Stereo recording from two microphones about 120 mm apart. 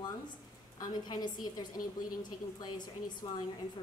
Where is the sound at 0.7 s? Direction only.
35° left (ahead or behind).